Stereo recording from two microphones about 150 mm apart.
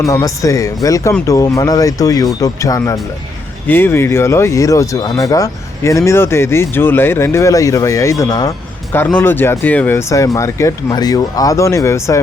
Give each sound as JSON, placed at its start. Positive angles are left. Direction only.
{"t": 0.0, "sound": "speech", "side_deg": 20}
{"t": 8.9, "sound": "speech", "side_deg": 15}